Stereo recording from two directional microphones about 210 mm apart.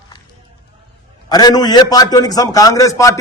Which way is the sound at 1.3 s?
20° left (ahead or behind).